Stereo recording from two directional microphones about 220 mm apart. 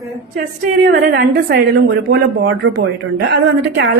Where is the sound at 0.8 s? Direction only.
45° right (ahead or behind).